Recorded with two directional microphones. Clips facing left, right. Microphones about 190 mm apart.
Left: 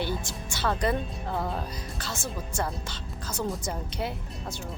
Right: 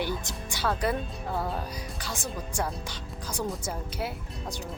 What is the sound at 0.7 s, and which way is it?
Speech, 5° right (ahead or behind).